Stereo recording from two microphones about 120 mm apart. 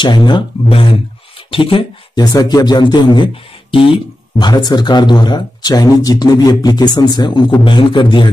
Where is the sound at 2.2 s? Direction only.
35° left (ahead or behind).